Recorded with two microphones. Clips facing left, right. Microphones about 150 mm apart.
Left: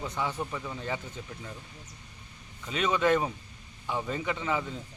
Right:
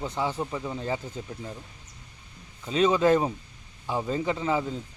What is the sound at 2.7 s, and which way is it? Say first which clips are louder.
A man's voice: right 5 dB; 30° right (ahead or behind).